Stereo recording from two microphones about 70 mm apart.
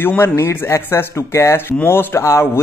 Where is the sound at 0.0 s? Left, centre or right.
Left.